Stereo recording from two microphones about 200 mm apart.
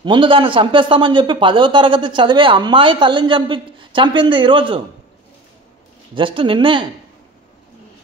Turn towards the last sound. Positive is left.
turn(degrees=-25)  # may be behind; listen again after turning